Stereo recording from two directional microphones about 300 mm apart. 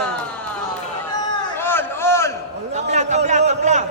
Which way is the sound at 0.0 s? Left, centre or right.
Centre.